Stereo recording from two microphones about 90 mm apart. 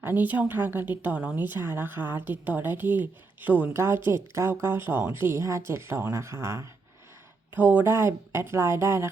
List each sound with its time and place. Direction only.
0.0 s speech: 20° right (ahead or behind)
7.5 s speech: 20° right (ahead or behind)